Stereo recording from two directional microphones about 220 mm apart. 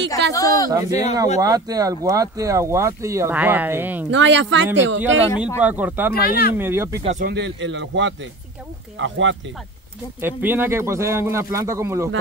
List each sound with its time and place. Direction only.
0.3 s speech: 15° left (ahead or behind)
0.7 s speech: 15° right (ahead or behind)
4.1 s a man's voice: 55° right (ahead or behind)
5.6 s speech: 5° right (ahead or behind)
6.2 s speech: 45° left (ahead or behind)
6.6 s speech: 10° right (ahead or behind)
7.0 s speech: 30° right (ahead or behind)
7.2 s a man's voice: 50° right (ahead or behind)
10.2 s speech: 10° right (ahead or behind)